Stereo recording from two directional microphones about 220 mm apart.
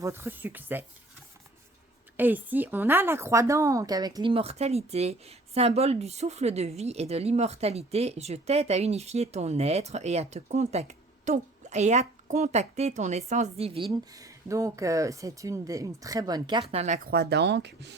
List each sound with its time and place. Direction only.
0.0 s speech: 10° right (ahead or behind)
2.1 s a woman's voice: 10° right (ahead or behind); by 17.0 s 30° right (ahead or behind)
17.1 s speech: 45° right (ahead or behind)